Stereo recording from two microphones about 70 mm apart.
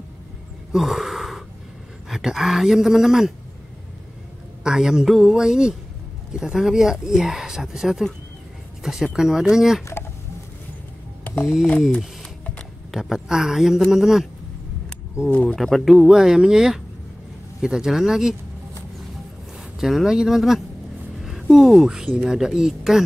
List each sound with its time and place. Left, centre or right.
0.7 s gasp: centre
2.0 s speech: centre
4.6 s speech: centre
12.9 s speech: centre
15.2 s speech: left
15.5 s speech: centre
19.8 s speech: centre